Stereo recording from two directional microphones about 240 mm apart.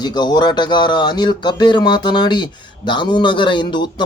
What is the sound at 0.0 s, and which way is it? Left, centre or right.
Speech, centre.